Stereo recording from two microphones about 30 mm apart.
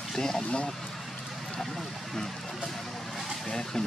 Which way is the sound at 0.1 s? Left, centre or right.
Centre.